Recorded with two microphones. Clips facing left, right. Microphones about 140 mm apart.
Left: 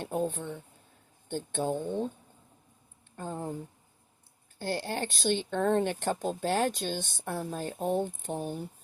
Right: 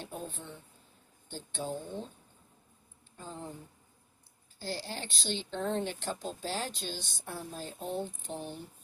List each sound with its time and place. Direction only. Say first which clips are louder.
0.0 s speech: left 10 dB; 55° left (ahead or behind)
3.2 s speech: left 7 dB; 55° left (ahead or behind)
4.6 s speech: left 7 dB; 55° left (ahead or behind)